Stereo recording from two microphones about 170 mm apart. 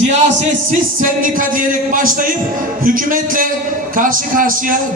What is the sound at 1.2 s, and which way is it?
A man's voice, 50° right (ahead or behind).